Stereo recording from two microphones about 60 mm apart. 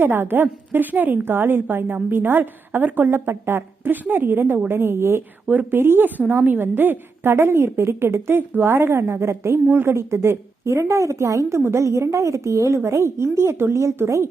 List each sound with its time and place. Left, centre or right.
0.0 s a woman's voice: right
9.6 s a woman's voice: right